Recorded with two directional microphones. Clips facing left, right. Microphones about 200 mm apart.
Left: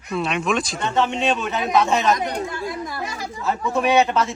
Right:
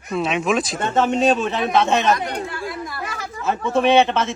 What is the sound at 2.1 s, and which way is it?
Speech, 20° left (ahead or behind).